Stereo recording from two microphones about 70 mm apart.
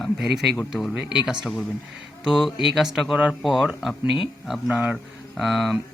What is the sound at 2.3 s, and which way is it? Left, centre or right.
Speech, centre.